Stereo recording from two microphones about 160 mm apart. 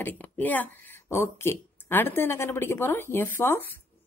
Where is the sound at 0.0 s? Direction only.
10° left (ahead or behind).